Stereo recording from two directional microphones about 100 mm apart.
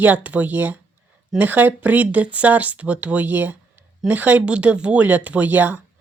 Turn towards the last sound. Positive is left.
turn(degrees=-15)  # may be behind; listen again after turning